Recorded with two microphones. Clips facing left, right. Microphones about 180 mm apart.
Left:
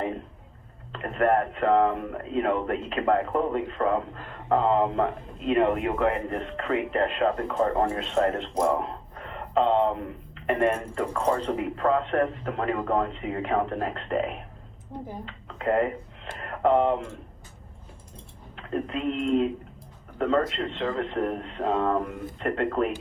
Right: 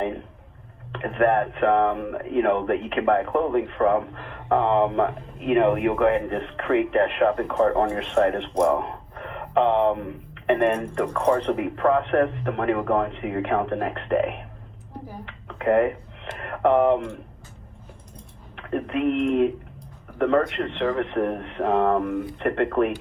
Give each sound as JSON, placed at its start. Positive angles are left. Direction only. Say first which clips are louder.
{"t": 1.1, "sound": "speech", "louder": "right 2 dB", "side_deg": -60}
{"t": 8.8, "sound": "a sound", "louder": "right 2 dB", "side_deg": -60}
{"t": 10.7, "sound": "speech", "louder": "right 3 dB", "side_deg": -70}
{"t": 15.6, "sound": "speech", "louder": "right 4 dB", "side_deg": -60}
{"t": 18.5, "sound": "speech", "louder": "right 4 dB", "side_deg": -60}